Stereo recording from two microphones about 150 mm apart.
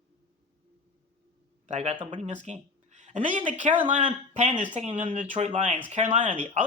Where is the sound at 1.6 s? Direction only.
50° right (ahead or behind).